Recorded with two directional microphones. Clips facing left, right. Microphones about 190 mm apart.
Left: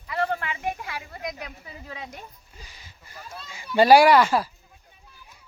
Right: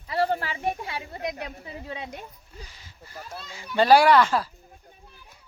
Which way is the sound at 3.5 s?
10° left (ahead or behind).